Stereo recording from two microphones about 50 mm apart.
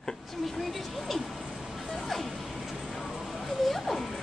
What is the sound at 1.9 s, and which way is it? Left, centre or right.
Music, centre.